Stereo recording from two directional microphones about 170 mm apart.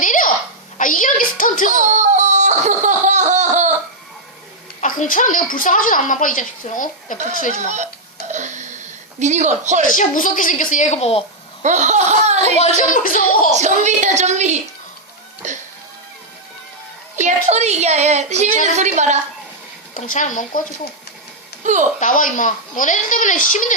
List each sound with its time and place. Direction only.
0.0 s a sound: 50° left (ahead or behind)
0.8 s music: 50° left (ahead or behind)
1.7 s a sound: 45° right (ahead or behind)
4.8 s a woman's voice: 50° left (ahead or behind)
8.3 s a sound: 45° right (ahead or behind)
10.0 s a woman's voice: 50° left (ahead or behind)
11.6 s speech: 45° right (ahead or behind)
12.9 s a woman's voice: 50° left (ahead or behind)
13.5 s a woman's voice: 45° right (ahead or behind)
17.2 s a woman's voice: 40° right (ahead or behind)
19.9 s a woman's voice: 45° left (ahead or behind)
21.6 s speech: 45° right (ahead or behind)
22.0 s a woman's voice: 50° left (ahead or behind)